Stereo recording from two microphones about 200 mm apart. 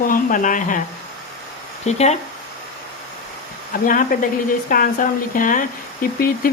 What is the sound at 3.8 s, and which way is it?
Speech, 45° left (ahead or behind).